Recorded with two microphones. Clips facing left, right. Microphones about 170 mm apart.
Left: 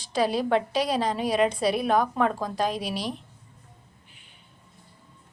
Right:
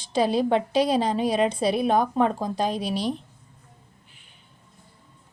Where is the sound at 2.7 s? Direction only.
Centre (ahead or behind).